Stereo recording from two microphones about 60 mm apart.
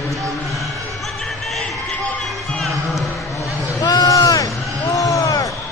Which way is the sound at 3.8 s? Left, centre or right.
Left.